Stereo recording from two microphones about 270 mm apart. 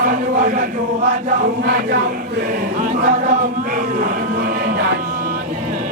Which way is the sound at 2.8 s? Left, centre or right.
Right.